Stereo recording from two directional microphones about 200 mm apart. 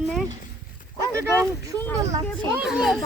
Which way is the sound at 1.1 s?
15° right (ahead or behind).